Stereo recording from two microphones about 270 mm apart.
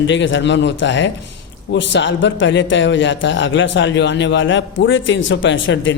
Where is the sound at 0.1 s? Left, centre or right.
Left.